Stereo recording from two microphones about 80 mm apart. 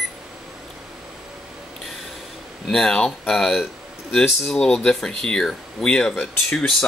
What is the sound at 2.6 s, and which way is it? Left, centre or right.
Speech, centre.